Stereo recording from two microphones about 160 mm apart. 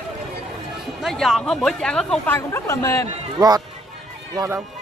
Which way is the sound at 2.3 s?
15° left (ahead or behind).